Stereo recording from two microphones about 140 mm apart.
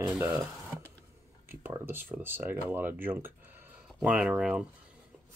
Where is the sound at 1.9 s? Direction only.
15° right (ahead or behind).